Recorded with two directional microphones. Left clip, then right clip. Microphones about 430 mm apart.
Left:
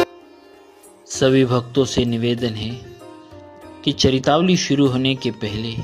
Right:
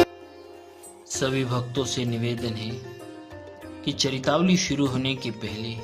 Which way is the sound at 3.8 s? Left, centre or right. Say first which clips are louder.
Left 8 dB; centre.